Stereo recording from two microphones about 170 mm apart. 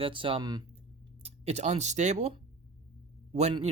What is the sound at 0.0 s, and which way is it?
Speech, 30° right (ahead or behind).